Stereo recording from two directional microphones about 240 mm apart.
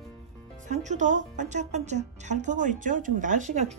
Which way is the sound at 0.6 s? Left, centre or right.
Right.